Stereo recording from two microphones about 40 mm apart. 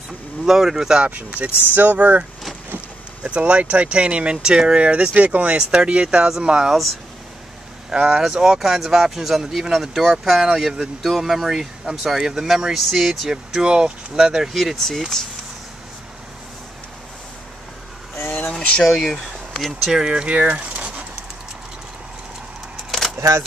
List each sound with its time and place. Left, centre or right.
0.5 s speech: centre
1.0 s speech: right
1.7 s speech: right
3.3 s speech: right
5.6 s speech: right
8.1 s speech: centre
13.3 s speech: centre
14.5 s speech: centre
14.8 s speech: centre
18.2 s a sound: left
18.9 s speech: centre
19.9 s speech: centre
20.2 s a sound: right
22.8 s keys jangling: centre